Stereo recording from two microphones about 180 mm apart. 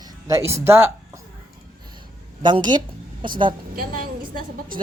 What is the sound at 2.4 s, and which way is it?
Speech, 25° right (ahead or behind).